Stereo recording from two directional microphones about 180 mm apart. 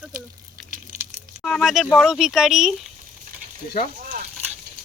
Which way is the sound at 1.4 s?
Centre (ahead or behind).